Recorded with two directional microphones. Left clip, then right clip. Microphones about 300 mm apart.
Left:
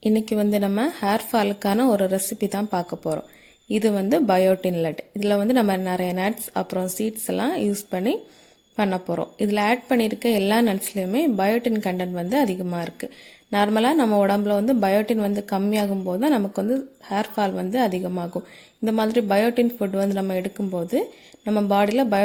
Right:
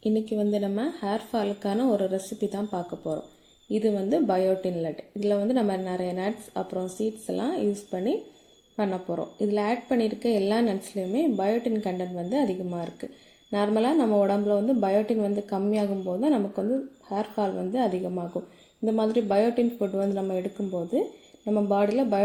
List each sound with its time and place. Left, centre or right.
0.0 s a woman's voice: left